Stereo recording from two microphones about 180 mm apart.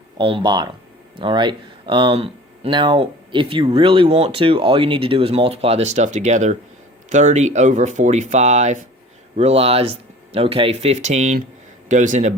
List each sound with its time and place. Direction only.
0.2 s speech: 30° right (ahead or behind)